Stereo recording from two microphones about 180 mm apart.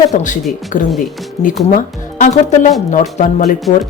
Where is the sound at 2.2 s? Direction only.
40° left (ahead or behind).